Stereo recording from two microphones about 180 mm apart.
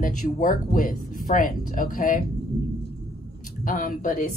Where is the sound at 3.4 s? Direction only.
45° left (ahead or behind).